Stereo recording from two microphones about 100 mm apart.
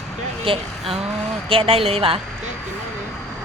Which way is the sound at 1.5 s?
70° right (ahead or behind).